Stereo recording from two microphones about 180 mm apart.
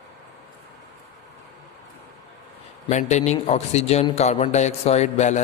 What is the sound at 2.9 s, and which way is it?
A man's voice, 40° left (ahead or behind).